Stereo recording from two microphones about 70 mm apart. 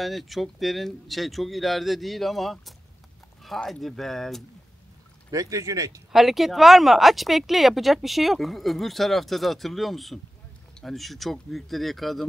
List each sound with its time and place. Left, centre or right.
0.0 s speech: centre
5.3 s speech: right
6.1 s speech: centre